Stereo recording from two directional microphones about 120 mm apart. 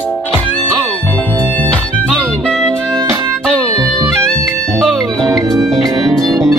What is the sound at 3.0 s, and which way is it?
Music, 25° right (ahead or behind).